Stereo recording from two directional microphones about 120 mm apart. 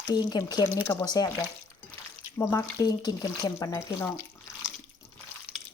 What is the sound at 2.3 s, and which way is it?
Speech, 30° left (ahead or behind).